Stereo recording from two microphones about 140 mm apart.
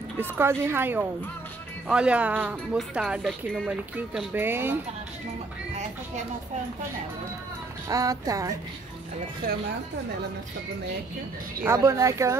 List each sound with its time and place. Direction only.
0.2 s speech: 15° right (ahead or behind)
7.9 s speech: 25° right (ahead or behind)
11.6 s speech: 20° right (ahead or behind)